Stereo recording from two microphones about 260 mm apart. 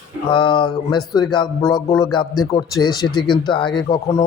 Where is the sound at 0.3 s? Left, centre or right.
Centre.